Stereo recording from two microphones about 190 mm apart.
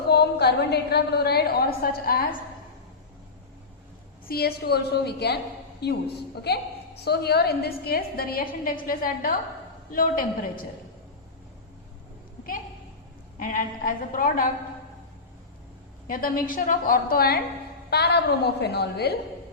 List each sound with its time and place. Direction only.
0.1 s a woman's voice: 60° left (ahead or behind)
4.3 s a woman's voice: 55° left (ahead or behind)
13.4 s a woman's voice: 45° left (ahead or behind)
16.0 s a woman's voice: 50° left (ahead or behind)